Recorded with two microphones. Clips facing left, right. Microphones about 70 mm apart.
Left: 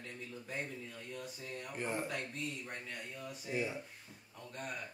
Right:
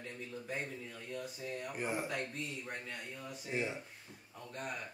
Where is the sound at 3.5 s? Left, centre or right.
Right.